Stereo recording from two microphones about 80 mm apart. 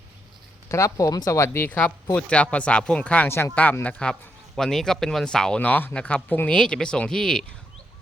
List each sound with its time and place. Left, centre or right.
0.7 s speech: left
1.6 s speech: centre
3.2 s speech: left
3.5 s speech: centre
4.1 s speech: centre
5.5 s speech: centre